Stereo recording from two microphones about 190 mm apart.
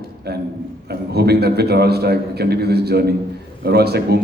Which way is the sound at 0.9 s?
60° right (ahead or behind).